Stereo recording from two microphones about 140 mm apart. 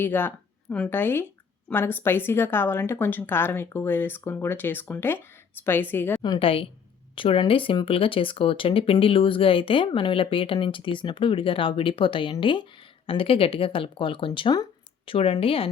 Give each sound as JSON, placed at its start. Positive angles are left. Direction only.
{"t": 0.0, "sound": "a woman's voice", "side_deg": 15}
{"t": 6.2, "sound": "speech", "side_deg": 35}